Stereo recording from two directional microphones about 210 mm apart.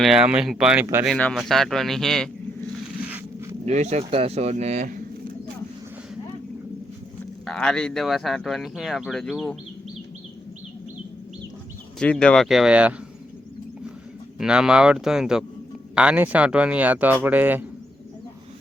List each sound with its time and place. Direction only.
0.0 s speech: 5° right (ahead or behind)
1.0 s speech: centre (ahead or behind)
3.7 s speech: 35° right (ahead or behind)
7.4 s speech: 5° left (ahead or behind)
11.9 s speech: 5° left (ahead or behind)
14.3 s speech: 5° right (ahead or behind)